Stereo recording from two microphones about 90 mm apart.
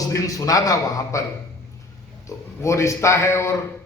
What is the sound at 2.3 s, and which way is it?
A man's voice, 35° left (ahead or behind).